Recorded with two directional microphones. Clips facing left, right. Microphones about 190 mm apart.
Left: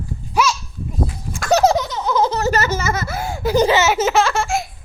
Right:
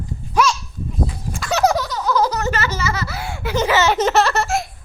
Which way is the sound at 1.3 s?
45° left (ahead or behind).